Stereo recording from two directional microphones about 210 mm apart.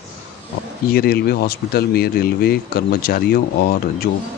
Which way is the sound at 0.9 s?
45° left (ahead or behind).